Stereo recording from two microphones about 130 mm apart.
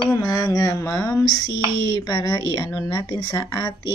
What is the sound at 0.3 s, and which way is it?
Speech, 30° left (ahead or behind).